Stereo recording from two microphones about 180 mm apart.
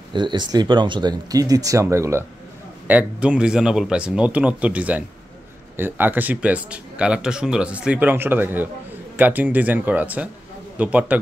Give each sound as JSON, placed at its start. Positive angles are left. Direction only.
{"t": 0.1, "sound": "speech", "side_deg": -25}